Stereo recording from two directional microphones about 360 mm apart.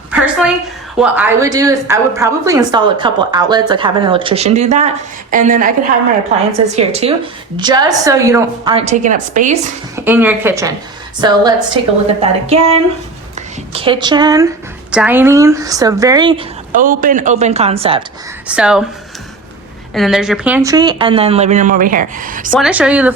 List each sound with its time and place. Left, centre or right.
0.1 s a sound: centre
0.9 s a woman's voice: centre; by 5.7 s right
6.7 s a woman's voice: centre
9.9 s a woman's voice: centre
16.8 s speech: right
18.4 s a woman's voice: centre
19.9 s a woman's voice: centre; by 22.5 s right
22.5 s a woman's voice: centre